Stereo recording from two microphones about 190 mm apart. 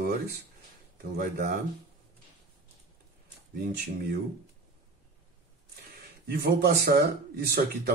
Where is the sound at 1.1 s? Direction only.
55° right (ahead or behind).